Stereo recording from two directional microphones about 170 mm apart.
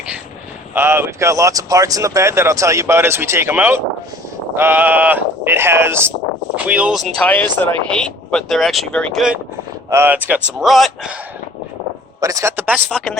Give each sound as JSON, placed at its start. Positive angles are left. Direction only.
{"t": 0.7, "sound": "speech", "side_deg": -15}
{"t": 7.2, "sound": "speech", "side_deg": 10}
{"t": 9.9, "sound": "speech", "side_deg": -10}
{"t": 12.2, "sound": "speech", "side_deg": -20}